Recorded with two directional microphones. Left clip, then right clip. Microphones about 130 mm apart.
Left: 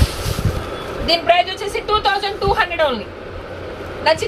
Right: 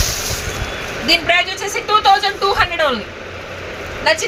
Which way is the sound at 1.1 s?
20° left (ahead or behind).